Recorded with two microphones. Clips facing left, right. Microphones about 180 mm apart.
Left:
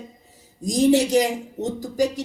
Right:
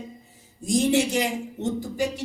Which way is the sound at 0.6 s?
40° left (ahead or behind).